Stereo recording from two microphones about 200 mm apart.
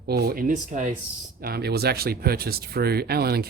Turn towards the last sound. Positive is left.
turn(degrees=-50)  # may be behind; listen again after turning